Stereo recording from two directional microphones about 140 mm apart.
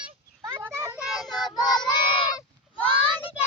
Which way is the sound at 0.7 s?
20° right (ahead or behind).